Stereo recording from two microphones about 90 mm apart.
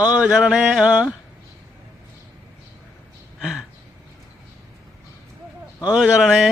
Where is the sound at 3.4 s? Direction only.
5° right (ahead or behind).